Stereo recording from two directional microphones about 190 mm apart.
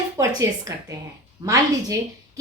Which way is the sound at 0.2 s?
15° right (ahead or behind).